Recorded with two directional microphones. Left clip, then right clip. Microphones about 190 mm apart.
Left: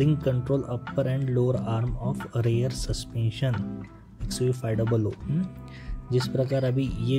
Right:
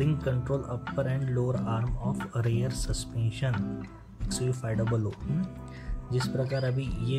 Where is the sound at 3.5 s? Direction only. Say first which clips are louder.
Even; centre (ahead or behind).